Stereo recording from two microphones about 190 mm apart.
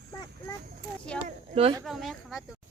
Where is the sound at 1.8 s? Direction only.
Centre (ahead or behind).